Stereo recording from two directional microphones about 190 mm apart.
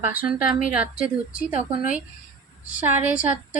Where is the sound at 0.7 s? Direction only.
5° right (ahead or behind).